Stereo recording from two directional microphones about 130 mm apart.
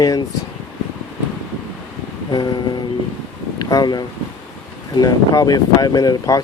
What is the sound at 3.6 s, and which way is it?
Speech, 30° left (ahead or behind).